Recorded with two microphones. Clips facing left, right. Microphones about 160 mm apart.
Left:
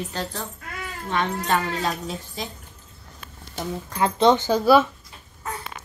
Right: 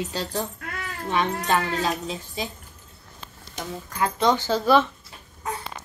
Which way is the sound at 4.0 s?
25° left (ahead or behind).